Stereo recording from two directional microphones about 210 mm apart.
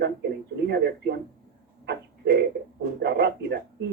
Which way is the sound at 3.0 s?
55° right (ahead or behind).